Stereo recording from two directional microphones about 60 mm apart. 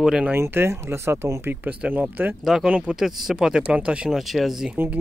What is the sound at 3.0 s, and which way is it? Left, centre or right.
Speech, centre.